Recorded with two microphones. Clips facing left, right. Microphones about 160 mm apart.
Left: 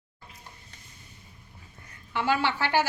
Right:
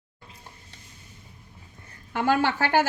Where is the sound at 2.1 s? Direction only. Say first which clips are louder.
Right 3 dB; 45° right (ahead or behind).